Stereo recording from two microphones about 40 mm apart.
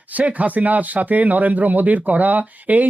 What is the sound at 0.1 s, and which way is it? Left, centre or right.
Speech, right.